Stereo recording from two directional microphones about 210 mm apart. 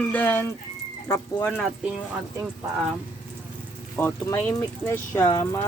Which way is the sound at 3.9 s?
10° left (ahead or behind).